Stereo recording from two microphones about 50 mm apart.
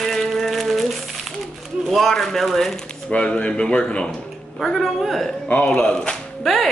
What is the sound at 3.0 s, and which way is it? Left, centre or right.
Speech, left.